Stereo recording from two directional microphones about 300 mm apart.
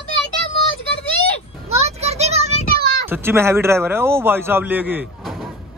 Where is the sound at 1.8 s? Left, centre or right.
Right.